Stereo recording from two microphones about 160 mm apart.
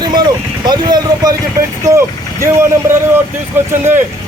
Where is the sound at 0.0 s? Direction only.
25° right (ahead or behind).